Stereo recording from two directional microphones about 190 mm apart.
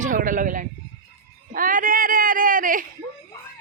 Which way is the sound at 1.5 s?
45° right (ahead or behind).